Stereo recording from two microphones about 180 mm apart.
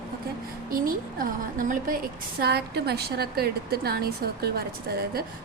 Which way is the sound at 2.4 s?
65° right (ahead or behind).